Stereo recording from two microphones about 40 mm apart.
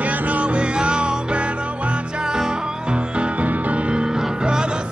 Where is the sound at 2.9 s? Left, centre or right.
Right.